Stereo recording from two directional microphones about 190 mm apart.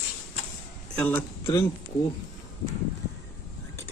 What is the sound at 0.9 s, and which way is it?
Speech, 10° left (ahead or behind).